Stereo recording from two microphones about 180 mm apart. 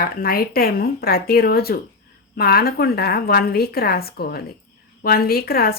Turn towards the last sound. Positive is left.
turn(degrees=55)  # may be behind; listen again after turning